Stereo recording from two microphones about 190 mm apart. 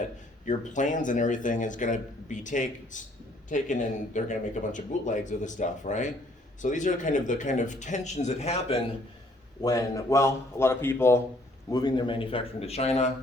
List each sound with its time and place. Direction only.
0.4 s speech: 40° left (ahead or behind)
9.6 s a man's voice: 20° left (ahead or behind); by 13.1 s 35° left (ahead or behind)